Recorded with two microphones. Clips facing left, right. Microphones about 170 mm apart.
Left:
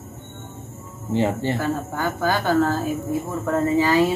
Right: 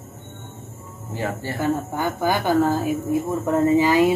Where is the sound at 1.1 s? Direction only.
25° left (ahead or behind).